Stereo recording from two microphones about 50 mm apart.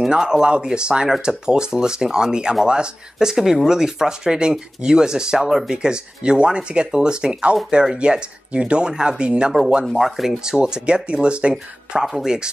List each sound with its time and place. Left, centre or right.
0.1 s speech: centre
9.8 s speech: centre
10.4 s speech: centre